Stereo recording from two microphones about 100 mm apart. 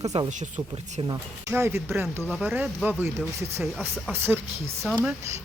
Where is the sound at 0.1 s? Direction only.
90° right.